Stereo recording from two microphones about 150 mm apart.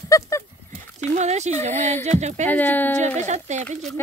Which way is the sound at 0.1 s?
20° left (ahead or behind).